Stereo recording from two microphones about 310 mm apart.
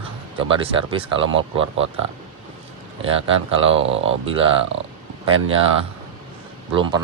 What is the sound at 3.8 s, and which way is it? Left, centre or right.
Speech, right.